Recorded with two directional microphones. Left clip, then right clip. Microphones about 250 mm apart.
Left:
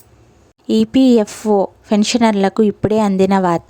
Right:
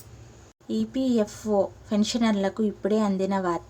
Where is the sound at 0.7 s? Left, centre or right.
Left.